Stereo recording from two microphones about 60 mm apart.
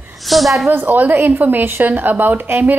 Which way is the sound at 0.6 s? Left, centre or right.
Right.